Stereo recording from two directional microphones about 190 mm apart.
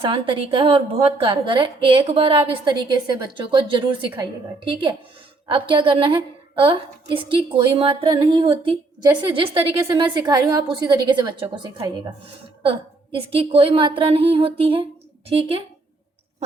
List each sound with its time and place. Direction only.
0.0 s a woman's voice: 30° right (ahead or behind)
5.5 s a woman's voice: 25° right (ahead or behind)
12.6 s a woman's voice: 30° right (ahead or behind)